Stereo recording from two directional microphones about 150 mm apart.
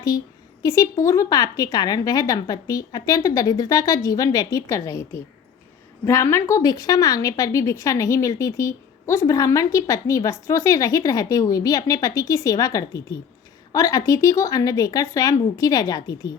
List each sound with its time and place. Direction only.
0.6 s a woman's voice: 20° left (ahead or behind)